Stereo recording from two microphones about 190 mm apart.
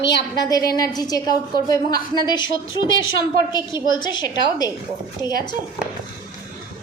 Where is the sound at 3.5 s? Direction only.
25° left (ahead or behind).